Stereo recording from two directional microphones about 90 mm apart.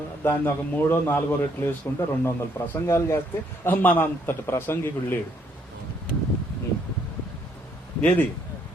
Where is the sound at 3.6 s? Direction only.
20° left (ahead or behind).